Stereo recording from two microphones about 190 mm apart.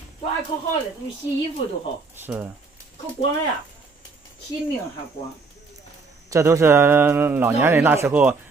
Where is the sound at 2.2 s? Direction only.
10° right (ahead or behind).